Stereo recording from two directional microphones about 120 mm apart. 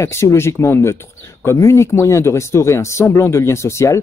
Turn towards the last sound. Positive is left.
turn(degrees=25)  # may be behind; listen again after turning